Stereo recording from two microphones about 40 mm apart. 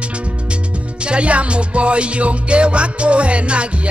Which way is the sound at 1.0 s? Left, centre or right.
Right.